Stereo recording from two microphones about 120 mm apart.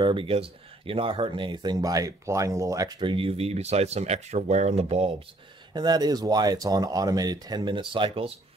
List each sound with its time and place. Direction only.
0.0 s speech: 45° right (ahead or behind); by 5.1 s 60° right (ahead or behind)
5.7 s speech: 35° right (ahead or behind)